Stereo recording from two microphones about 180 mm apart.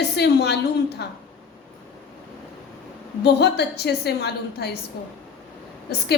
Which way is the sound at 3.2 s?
65° left (ahead or behind).